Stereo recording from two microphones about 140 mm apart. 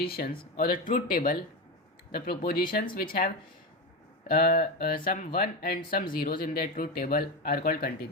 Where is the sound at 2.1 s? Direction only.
90° left.